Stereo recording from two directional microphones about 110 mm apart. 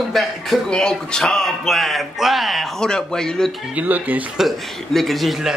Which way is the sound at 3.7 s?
15° right (ahead or behind).